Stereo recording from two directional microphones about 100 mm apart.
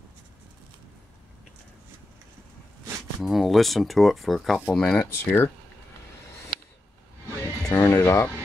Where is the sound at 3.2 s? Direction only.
Centre (ahead or behind).